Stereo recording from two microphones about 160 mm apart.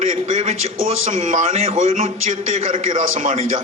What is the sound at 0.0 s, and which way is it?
A man's voice, 50° right (ahead or behind).